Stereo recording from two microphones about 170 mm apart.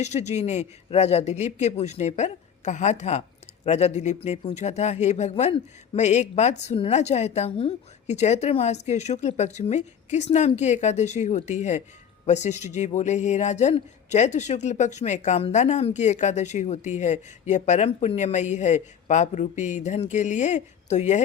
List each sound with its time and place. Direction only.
0.0 s speech: 40° left (ahead or behind)